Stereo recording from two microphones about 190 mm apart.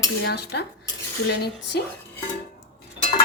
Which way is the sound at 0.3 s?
60° left (ahead or behind).